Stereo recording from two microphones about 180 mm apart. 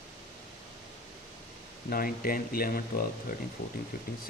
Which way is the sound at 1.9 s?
55° left (ahead or behind).